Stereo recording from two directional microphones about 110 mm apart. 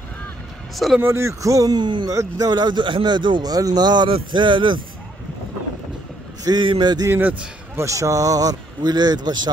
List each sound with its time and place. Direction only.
0.7 s speech: centre (ahead or behind)
1.0 s speech: 25° right (ahead or behind); by 4.7 s 45° right (ahead or behind)
6.4 s speech: 45° right (ahead or behind)
7.1 s a man's voice: 20° right (ahead or behind); by 9.5 s 40° right (ahead or behind)